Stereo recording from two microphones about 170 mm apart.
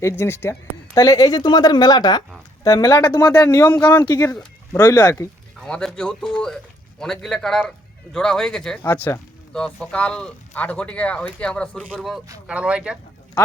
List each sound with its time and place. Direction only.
0.0 s speech: 15° left (ahead or behind)
3.7 s speech: 10° left (ahead or behind)
4.0 s speech: 20° left (ahead or behind)
5.5 s a man's voice: 5° left (ahead or behind)